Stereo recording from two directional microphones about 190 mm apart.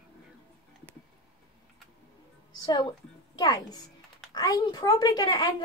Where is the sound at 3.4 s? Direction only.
20° left (ahead or behind).